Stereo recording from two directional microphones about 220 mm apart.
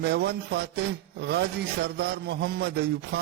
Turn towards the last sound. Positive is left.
turn(degrees=-45)  # may be behind; listen again after turning